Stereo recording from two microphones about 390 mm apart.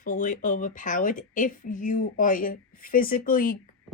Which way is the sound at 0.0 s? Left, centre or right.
Centre.